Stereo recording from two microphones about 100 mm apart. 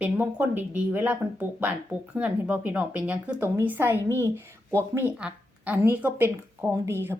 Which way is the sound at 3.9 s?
25° left (ahead or behind).